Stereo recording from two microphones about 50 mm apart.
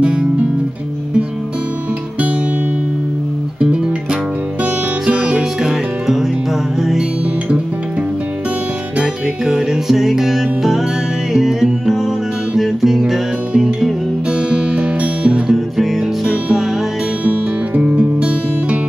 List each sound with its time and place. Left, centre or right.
0.0 s guitar: centre
3.6 s music: centre
5.6 s music: centre
9.0 s music: centre
14.5 s music: right
15.5 s music: centre
17.2 s music: right